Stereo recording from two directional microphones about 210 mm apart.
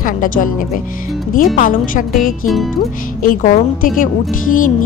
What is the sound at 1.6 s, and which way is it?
A woman's voice, 40° left (ahead or behind).